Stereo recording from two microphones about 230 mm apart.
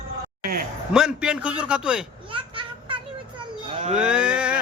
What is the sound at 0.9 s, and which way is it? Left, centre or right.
A man's voice, centre.